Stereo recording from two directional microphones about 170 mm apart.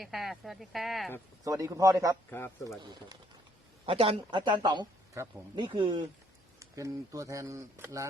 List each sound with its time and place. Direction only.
0.0 s speech: centre (ahead or behind)
1.5 s speech: 20° right (ahead or behind)
2.3 s a man's voice: 10° left (ahead or behind)
3.8 s speech: 35° right (ahead or behind); by 8.0 s 20° right (ahead or behind)